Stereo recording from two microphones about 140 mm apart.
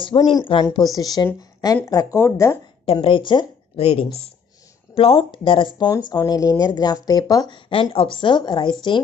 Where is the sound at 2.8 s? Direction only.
40° left (ahead or behind).